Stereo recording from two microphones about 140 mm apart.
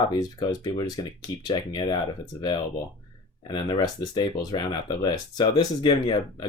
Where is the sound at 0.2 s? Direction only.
30° left (ahead or behind).